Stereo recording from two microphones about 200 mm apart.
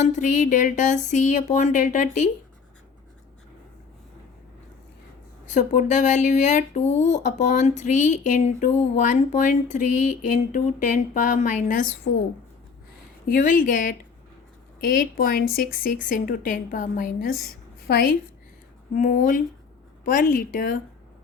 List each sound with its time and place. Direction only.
0.0 s speech: 40° left (ahead or behind)
5.5 s speech: 40° left (ahead or behind)
13.2 s a woman's voice: 45° left (ahead or behind)
18.9 s a woman's voice: 40° left (ahead or behind)